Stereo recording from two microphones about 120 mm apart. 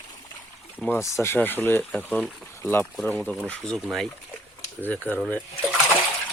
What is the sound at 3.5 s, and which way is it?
Speech, 5° left (ahead or behind).